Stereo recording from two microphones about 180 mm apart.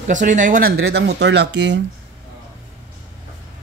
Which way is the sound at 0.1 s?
45° right (ahead or behind).